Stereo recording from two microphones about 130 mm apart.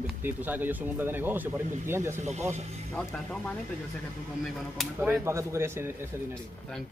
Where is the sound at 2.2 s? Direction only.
60° right (ahead or behind).